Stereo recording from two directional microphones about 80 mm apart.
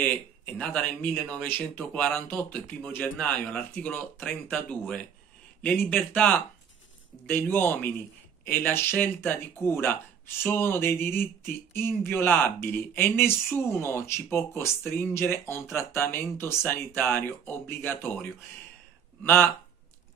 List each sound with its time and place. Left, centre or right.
0.0 s speech: centre
19.2 s speech: left